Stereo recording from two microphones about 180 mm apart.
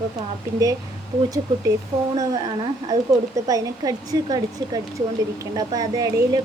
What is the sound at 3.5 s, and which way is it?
A woman's voice, 20° right (ahead or behind).